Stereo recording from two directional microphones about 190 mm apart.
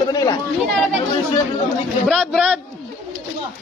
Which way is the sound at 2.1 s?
5° right (ahead or behind).